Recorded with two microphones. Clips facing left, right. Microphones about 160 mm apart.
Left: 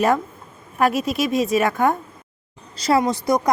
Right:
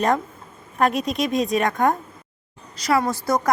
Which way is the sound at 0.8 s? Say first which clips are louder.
Left 1 dB; 5° left (ahead or behind).